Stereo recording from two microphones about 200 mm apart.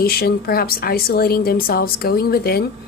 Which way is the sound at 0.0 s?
50° left (ahead or behind).